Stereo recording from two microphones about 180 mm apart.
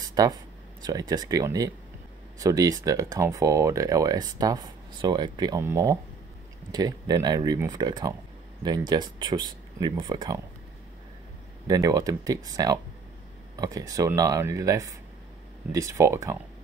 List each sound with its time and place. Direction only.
0.1 s speech: 20° right (ahead or behind)
11.6 s speech: 20° right (ahead or behind)